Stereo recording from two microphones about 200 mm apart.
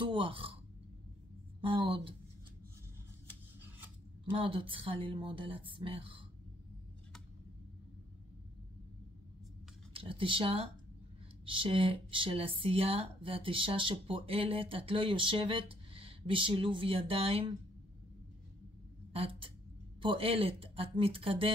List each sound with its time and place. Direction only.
0.0 s speech: 25° right (ahead or behind)
1.6 s speech: 25° right (ahead or behind)
4.3 s speech: 25° right (ahead or behind)
9.9 s speech: 25° right (ahead or behind)
19.1 s speech: 30° right (ahead or behind)